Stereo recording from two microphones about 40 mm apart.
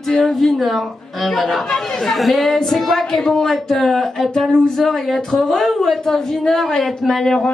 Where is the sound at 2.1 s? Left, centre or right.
Centre.